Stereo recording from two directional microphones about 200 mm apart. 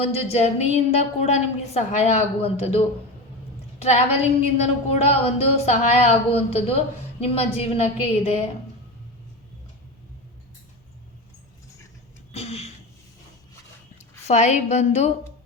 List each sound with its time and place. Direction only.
0.0 s a woman's voice: 30° left (ahead or behind)
12.3 s a sound: 30° left (ahead or behind)
14.3 s a woman's voice: 35° left (ahead or behind)